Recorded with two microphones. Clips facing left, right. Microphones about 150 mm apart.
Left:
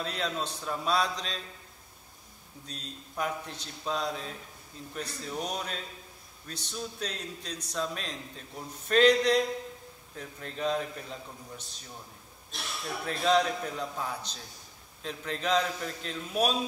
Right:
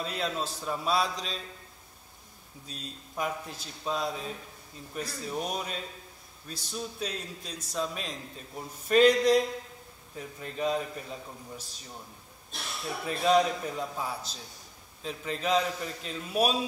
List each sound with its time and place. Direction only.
0.0 s a man's voice: 5° right (ahead or behind)
2.7 s a man's voice: 5° right (ahead or behind)
13.0 s a man's voice: 10° right (ahead or behind)